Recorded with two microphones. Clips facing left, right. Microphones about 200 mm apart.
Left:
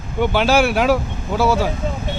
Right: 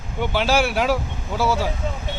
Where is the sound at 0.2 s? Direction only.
60° left (ahead or behind).